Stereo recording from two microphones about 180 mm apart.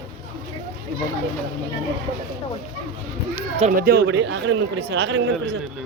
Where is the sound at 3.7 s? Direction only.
60° right (ahead or behind).